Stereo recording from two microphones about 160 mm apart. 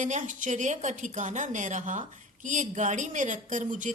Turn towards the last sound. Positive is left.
turn(degrees=-50)  # may be behind; listen again after turning